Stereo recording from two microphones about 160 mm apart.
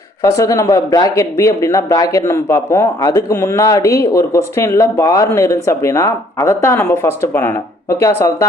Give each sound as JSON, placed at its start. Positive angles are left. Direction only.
{"t": 0.2, "sound": "speech", "side_deg": 20}